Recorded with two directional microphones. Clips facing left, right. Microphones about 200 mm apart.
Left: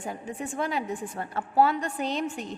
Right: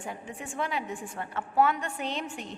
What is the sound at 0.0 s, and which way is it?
A woman's voice, 40° left (ahead or behind).